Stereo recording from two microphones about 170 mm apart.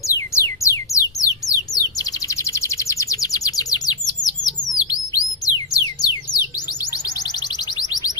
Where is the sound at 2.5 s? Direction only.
15° left (ahead or behind).